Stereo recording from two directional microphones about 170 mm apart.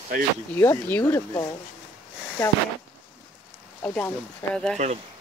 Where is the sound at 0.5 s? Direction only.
15° left (ahead or behind).